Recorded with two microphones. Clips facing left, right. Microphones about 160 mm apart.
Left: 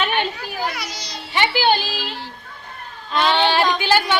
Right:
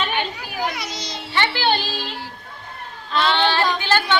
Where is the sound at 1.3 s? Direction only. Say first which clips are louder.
Left 3 dB; 10° left (ahead or behind).